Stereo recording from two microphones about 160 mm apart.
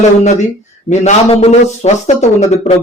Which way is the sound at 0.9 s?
45° left (ahead or behind).